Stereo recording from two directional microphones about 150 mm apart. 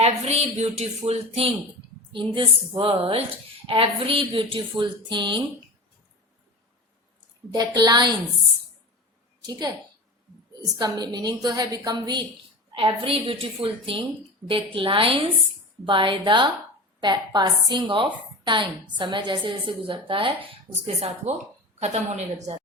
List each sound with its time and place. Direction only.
0.3 s speech: 45° right (ahead or behind)
2.1 s a woman's voice: 35° right (ahead or behind)
7.5 s a woman's voice: 25° right (ahead or behind)
9.5 s a woman's voice: 25° right (ahead or behind); by 22.5 s 50° right (ahead or behind)